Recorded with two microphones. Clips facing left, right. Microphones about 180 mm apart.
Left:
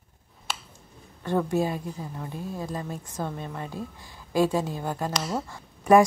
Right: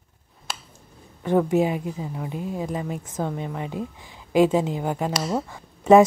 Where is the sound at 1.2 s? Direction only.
15° right (ahead or behind).